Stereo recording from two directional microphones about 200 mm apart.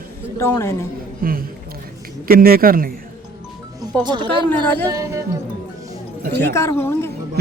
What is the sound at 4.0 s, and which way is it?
Speech, 25° right (ahead or behind).